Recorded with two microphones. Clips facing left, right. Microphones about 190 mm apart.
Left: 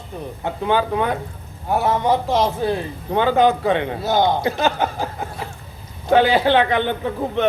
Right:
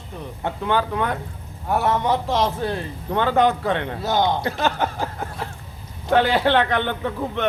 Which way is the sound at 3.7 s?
10° left (ahead or behind).